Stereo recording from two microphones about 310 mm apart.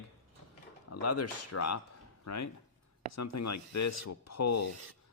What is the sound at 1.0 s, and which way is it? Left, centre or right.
Speech, left.